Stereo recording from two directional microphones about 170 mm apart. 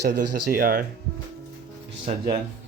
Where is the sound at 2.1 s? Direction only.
45° right (ahead or behind).